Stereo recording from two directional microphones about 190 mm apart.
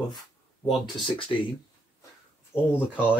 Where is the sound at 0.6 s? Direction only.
30° left (ahead or behind).